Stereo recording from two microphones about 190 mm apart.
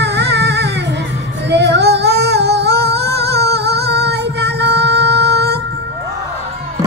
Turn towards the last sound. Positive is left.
turn(degrees=-60)  # may be behind; listen again after turning